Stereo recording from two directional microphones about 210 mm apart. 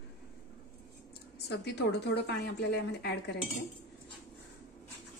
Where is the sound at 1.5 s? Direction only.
55° left (ahead or behind).